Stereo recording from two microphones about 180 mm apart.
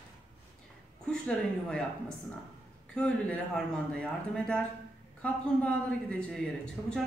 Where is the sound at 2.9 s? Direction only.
5° left (ahead or behind).